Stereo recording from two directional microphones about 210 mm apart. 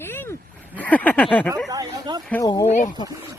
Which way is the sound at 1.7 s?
20° right (ahead or behind).